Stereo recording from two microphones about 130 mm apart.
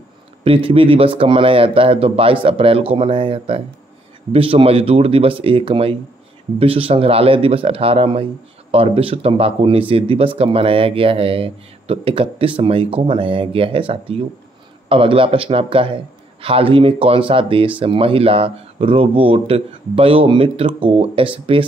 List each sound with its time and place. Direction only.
0.4 s a man's voice: 45° right (ahead or behind)